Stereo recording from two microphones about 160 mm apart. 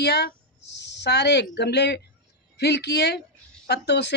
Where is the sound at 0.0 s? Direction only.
90° left.